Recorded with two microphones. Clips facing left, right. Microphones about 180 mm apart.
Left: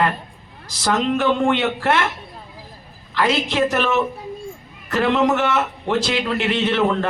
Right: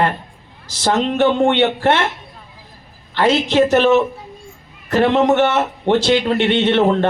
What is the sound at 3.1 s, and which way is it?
A man's voice, 30° right (ahead or behind).